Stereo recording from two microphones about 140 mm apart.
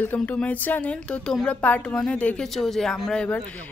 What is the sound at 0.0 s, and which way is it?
A woman's voice, 10° left (ahead or behind).